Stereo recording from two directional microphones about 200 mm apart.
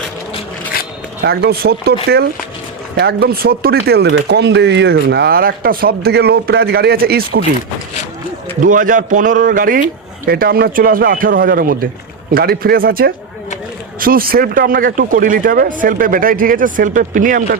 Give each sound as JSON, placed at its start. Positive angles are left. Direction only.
{"t": 0.7, "sound": "zipper", "side_deg": 50}
{"t": 1.2, "sound": "speech", "side_deg": -50}
{"t": 8.6, "sound": "a man's voice", "side_deg": -40}